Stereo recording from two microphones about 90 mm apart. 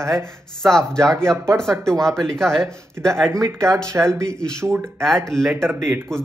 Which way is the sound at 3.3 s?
35° right (ahead or behind).